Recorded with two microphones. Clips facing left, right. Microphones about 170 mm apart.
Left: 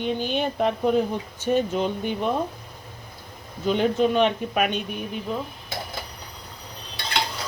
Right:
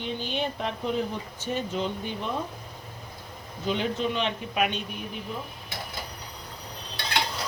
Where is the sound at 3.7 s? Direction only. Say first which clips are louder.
Left 7 dB; 50° left (ahead or behind).